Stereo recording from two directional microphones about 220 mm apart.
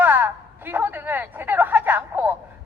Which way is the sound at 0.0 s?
10° right (ahead or behind).